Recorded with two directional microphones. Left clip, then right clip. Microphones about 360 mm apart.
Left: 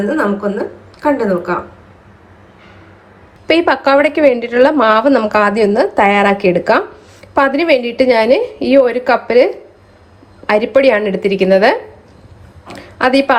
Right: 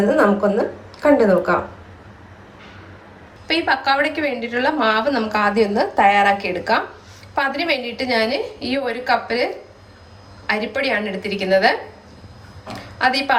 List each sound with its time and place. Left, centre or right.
0.0 s speech: centre
3.4 s a woman's voice: centre